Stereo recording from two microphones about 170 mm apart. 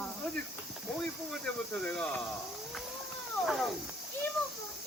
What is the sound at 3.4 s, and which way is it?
Speech, centre (ahead or behind).